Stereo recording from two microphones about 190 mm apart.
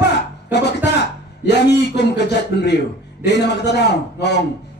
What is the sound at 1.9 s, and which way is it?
A man's voice, 60° left (ahead or behind).